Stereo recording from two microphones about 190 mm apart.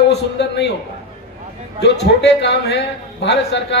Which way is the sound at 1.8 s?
60° left (ahead or behind).